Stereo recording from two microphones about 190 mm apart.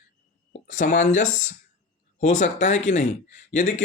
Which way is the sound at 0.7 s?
45° left (ahead or behind).